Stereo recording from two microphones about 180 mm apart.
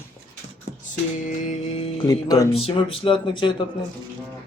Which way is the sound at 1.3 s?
35° left (ahead or behind).